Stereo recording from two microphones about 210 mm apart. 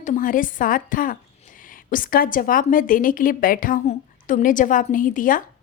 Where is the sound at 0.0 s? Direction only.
40° left (ahead or behind).